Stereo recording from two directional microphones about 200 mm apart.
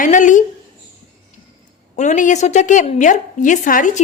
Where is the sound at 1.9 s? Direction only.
40° left (ahead or behind).